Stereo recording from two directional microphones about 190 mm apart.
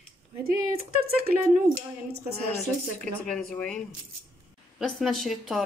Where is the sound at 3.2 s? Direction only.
5° left (ahead or behind).